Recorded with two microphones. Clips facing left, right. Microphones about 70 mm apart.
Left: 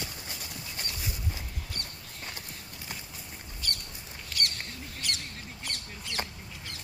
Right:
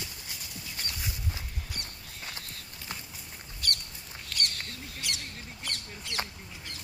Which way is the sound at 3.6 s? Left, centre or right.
Right.